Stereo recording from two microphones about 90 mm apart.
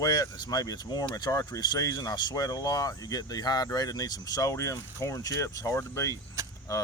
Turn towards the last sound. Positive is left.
turn(degrees=40)  # may be behind; listen again after turning